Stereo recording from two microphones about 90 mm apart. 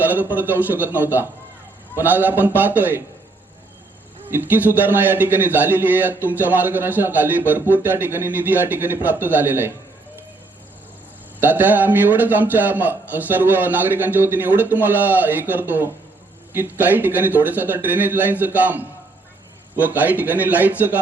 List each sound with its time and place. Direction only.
0.0 s a man's voice: 20° right (ahead or behind)
4.3 s a man's voice: 20° right (ahead or behind)
11.3 s a man's voice: 20° right (ahead or behind)